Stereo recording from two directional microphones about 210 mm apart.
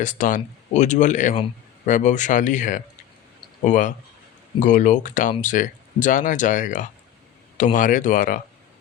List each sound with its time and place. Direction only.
0.0 s speech: 35° left (ahead or behind)